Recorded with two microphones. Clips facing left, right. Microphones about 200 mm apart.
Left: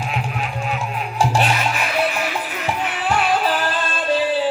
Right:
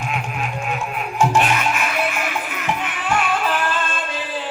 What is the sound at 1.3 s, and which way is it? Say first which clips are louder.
Music: right 1 dB; 35° left (ahead or behind).